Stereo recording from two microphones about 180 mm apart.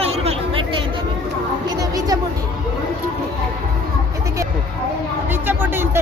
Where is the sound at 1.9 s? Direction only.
20° right (ahead or behind).